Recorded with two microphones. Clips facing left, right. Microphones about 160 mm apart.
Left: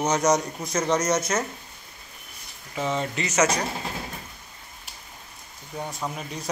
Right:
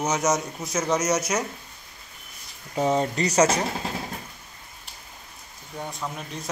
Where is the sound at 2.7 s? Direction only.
40° right (ahead or behind).